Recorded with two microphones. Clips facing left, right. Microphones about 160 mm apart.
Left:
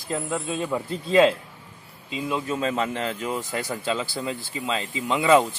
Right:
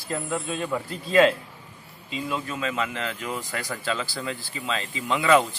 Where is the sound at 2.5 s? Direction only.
35° left (ahead or behind).